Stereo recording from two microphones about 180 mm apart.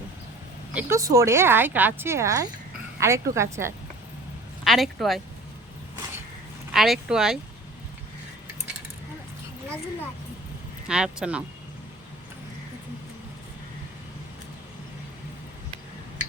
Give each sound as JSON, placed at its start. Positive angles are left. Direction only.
{"t": 0.7, "sound": "speech", "side_deg": -10}
{"t": 4.6, "sound": "speech", "side_deg": 0}
{"t": 6.7, "sound": "speech", "side_deg": 0}
{"t": 10.8, "sound": "speech", "side_deg": -5}